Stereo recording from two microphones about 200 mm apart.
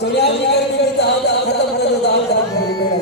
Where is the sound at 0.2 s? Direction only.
55° left (ahead or behind).